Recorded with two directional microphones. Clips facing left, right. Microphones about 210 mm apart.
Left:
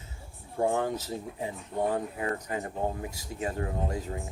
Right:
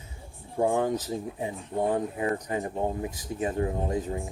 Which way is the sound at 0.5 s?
15° right (ahead or behind).